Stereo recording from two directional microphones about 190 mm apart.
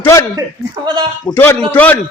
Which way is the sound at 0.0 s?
15° left (ahead or behind).